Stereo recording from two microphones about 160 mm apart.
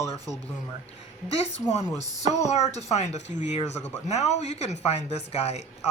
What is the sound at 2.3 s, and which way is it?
Speech, 45° left (ahead or behind).